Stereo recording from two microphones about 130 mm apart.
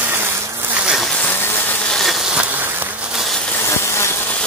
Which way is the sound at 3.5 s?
20° left (ahead or behind).